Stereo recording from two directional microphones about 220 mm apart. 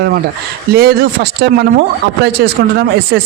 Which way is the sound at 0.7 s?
45° right (ahead or behind).